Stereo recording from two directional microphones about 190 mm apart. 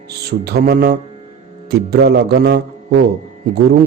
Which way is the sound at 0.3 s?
60° right (ahead or behind).